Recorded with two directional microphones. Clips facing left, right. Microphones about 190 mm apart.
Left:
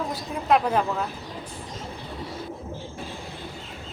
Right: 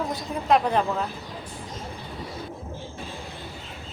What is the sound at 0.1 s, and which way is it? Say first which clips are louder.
Speech: even; 5° left (ahead or behind).